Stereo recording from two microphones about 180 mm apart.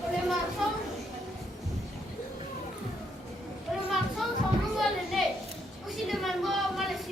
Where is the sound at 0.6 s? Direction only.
Centre (ahead or behind).